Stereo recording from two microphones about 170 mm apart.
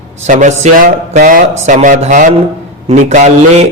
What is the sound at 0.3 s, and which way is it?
A man's voice, 45° right (ahead or behind).